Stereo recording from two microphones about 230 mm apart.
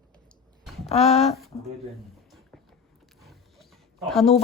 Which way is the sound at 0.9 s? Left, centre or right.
Left.